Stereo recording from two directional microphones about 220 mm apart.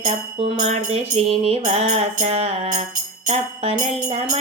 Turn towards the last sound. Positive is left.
turn(degrees=-30)  # may be behind; listen again after turning